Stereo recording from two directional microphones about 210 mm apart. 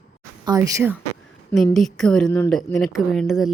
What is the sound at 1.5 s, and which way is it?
A woman's voice, centre (ahead or behind).